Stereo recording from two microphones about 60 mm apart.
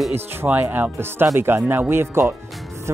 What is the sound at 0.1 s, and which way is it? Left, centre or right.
Speech, right.